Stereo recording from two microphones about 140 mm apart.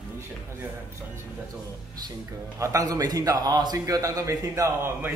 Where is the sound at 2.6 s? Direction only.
25° right (ahead or behind).